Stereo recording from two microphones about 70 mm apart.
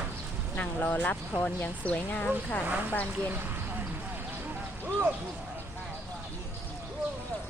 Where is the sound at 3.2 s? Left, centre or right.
Right.